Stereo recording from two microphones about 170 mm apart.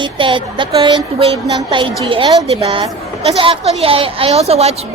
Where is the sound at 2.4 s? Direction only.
35° right (ahead or behind).